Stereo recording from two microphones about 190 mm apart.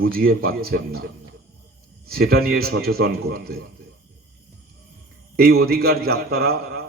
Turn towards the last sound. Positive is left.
turn(degrees=-55)  # may be behind; listen again after turning